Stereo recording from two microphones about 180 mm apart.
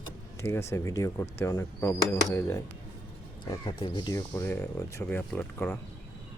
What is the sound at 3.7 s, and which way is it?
Speech, 25° left (ahead or behind).